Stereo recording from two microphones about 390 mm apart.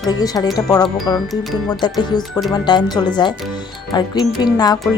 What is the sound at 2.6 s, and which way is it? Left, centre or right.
Speech, centre.